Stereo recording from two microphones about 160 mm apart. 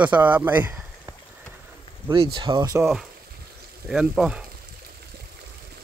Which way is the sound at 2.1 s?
30° right (ahead or behind).